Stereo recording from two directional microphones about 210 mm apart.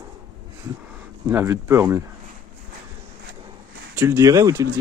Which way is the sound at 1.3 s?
10° right (ahead or behind).